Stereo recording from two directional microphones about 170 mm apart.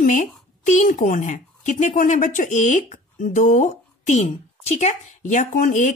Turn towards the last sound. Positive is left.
turn(degrees=50)  # may be behind; listen again after turning